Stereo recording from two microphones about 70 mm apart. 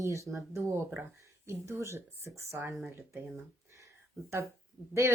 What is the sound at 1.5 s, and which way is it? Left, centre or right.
Speech, right.